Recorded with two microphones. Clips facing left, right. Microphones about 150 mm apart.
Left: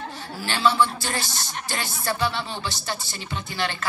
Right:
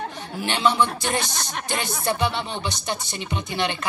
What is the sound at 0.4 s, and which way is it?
Speech, 20° right (ahead or behind).